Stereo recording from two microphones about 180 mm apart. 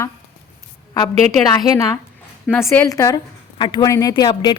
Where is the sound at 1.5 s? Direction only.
20° left (ahead or behind).